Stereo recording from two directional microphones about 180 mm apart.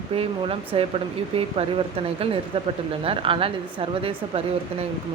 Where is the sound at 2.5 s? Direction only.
30° right (ahead or behind).